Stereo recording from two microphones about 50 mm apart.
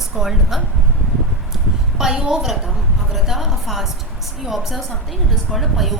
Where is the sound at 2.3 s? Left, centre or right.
Centre.